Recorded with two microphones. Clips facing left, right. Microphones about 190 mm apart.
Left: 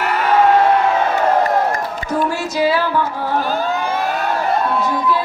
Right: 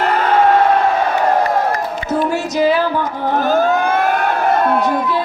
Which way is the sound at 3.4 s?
50° right (ahead or behind).